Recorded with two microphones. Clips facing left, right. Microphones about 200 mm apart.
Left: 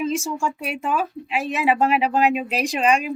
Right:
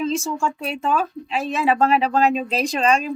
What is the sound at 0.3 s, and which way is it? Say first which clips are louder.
Speech: right 1 dB; 10° left (ahead or behind).